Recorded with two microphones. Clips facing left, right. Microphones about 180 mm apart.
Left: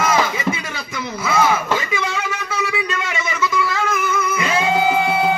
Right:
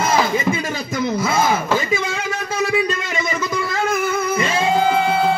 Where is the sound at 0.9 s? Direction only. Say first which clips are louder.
Right 1 dB; 40° right (ahead or behind).